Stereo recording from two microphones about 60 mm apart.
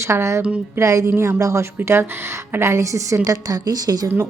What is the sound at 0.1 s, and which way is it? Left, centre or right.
A woman's voice, right.